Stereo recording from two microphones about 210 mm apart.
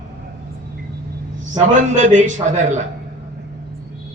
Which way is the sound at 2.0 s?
35° right (ahead or behind).